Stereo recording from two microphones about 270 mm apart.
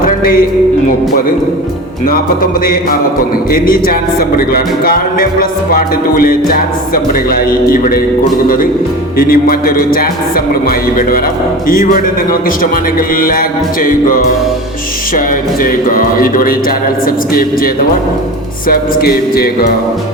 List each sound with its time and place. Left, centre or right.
2.0 s music: left
9.1 s music: left
15.6 s music: left
18.7 s music: left